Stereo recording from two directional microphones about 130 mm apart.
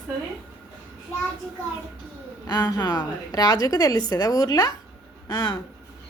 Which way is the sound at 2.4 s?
30° left (ahead or behind).